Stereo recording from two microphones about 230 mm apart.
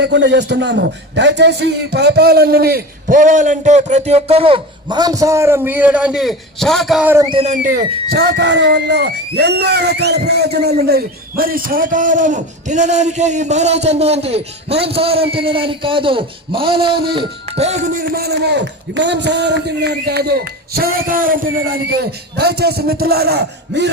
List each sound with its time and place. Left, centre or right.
0.0 s a man's voice: right; by 7.3 s centre
7.3 s a man's voice: right
22.4 s a man's voice: right